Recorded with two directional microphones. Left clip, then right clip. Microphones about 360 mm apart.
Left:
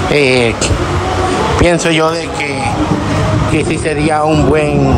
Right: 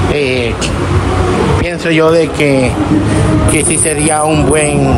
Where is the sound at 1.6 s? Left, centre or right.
Centre.